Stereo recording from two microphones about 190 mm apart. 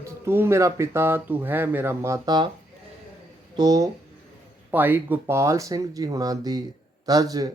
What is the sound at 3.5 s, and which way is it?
Speech, 20° right (ahead or behind).